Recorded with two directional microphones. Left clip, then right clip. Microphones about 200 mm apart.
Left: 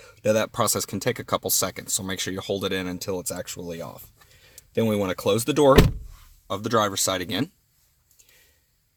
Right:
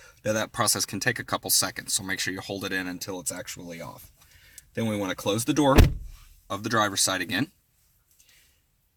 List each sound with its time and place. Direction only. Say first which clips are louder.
0.2 s speech: left 4 dB; 35° left (ahead or behind)
6.5 s speech: left 2 dB; 25° left (ahead or behind)